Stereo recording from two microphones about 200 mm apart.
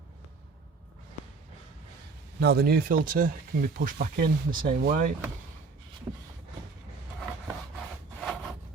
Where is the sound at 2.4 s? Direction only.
55° right (ahead or behind).